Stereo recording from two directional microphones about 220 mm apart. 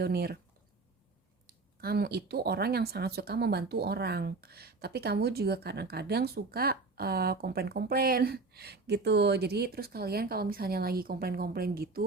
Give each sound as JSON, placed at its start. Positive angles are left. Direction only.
{"t": 0.0, "sound": "speech", "side_deg": -45}
{"t": 1.5, "sound": "speech", "side_deg": -45}